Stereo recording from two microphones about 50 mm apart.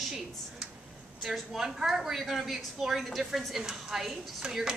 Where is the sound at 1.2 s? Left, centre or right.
Centre.